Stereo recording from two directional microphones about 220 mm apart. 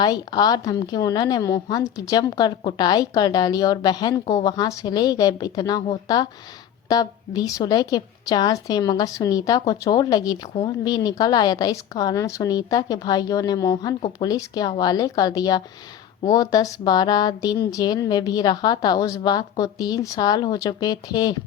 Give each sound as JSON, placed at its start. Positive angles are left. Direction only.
{"t": 0.0, "sound": "a woman's voice", "side_deg": 20}